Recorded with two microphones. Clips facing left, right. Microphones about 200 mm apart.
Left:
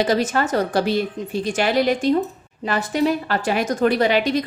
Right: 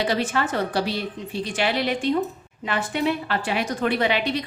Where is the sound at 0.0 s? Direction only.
40° left (ahead or behind).